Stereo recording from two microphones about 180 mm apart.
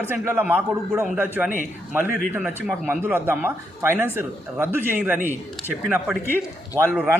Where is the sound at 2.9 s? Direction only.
10° right (ahead or behind).